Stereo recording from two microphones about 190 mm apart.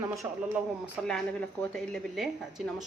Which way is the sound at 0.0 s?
15° right (ahead or behind).